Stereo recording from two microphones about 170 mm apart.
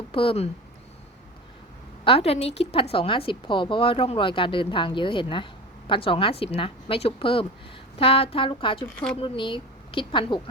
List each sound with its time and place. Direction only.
0.1 s speech: 35° left (ahead or behind)
2.0 s a woman's voice: 35° left (ahead or behind)